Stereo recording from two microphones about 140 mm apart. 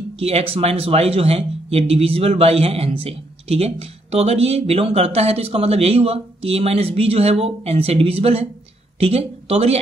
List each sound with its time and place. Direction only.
0.2 s a man's voice: 45° right (ahead or behind)